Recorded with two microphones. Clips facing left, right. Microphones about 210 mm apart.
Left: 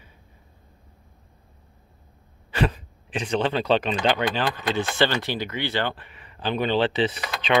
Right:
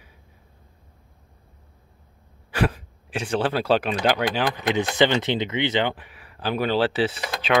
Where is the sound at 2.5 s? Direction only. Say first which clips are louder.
Right 1 dB; 10° right (ahead or behind).